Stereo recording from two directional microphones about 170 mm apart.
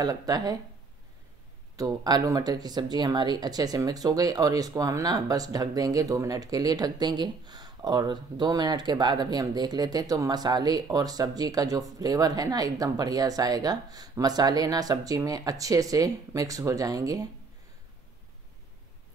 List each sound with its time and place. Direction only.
0.0 s speech: 20° right (ahead or behind)
1.8 s speech: 20° right (ahead or behind)